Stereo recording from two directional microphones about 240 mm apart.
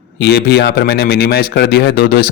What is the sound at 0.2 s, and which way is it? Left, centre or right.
A man's voice, left.